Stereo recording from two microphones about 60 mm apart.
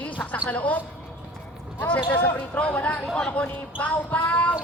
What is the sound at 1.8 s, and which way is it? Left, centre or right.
Speech, left.